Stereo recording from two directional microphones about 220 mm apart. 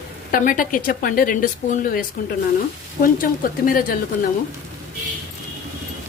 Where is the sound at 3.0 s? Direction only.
40° left (ahead or behind).